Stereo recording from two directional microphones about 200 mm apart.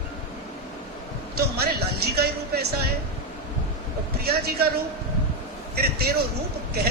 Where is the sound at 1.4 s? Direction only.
50° right (ahead or behind).